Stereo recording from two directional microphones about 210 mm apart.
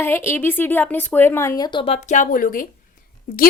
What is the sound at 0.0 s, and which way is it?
A woman's voice, 10° left (ahead or behind).